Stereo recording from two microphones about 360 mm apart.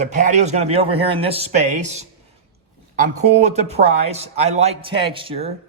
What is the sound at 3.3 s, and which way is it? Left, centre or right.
Speech, centre.